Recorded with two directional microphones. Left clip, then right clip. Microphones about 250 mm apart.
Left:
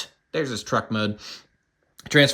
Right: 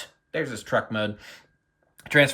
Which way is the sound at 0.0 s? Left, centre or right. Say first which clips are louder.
Left 3 dB; centre.